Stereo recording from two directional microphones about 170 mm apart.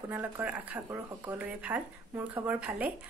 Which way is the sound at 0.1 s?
10° right (ahead or behind).